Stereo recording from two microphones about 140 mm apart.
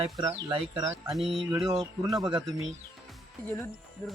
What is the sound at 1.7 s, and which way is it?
Speech, 25° right (ahead or behind).